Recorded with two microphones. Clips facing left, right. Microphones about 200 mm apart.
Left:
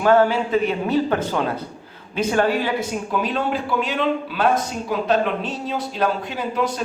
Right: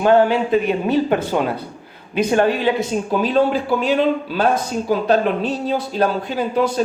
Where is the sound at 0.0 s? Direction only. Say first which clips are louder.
Right 2 dB; 15° right (ahead or behind).